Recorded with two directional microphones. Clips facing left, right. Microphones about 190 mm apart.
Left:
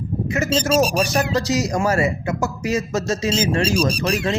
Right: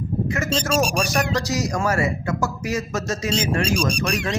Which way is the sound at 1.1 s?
30° left (ahead or behind).